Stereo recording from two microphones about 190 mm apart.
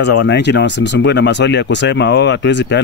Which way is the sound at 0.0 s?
65° left (ahead or behind).